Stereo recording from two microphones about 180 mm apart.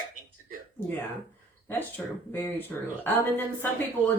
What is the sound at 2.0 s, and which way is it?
Speech, 10° left (ahead or behind).